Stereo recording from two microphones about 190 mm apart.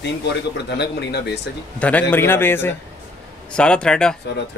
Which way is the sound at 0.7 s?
60° left (ahead or behind).